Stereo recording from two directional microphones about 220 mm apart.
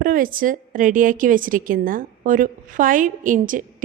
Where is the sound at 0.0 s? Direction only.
40° right (ahead or behind).